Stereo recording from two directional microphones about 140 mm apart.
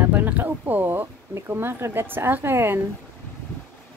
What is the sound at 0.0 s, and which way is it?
Speech, 10° right (ahead or behind).